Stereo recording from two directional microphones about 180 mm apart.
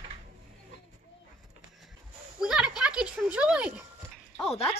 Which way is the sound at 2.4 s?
5° right (ahead or behind).